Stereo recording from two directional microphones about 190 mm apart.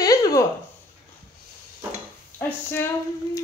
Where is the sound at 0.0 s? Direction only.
20° left (ahead or behind).